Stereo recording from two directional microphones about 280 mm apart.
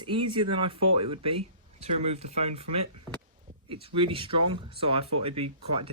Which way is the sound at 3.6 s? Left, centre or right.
Centre.